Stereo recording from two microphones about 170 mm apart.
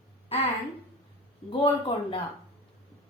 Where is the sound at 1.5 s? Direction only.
30° left (ahead or behind).